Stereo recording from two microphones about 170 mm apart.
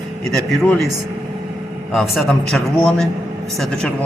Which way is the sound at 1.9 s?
Centre (ahead or behind).